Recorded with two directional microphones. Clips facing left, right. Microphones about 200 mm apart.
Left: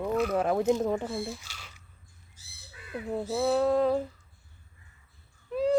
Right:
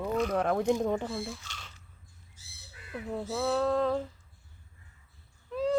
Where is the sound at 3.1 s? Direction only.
10° left (ahead or behind).